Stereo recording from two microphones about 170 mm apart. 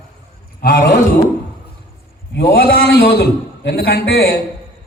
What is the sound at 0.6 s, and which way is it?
Speech, 60° left (ahead or behind).